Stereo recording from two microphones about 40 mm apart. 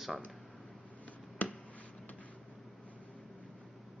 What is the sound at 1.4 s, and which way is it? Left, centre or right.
Finger snapping, left.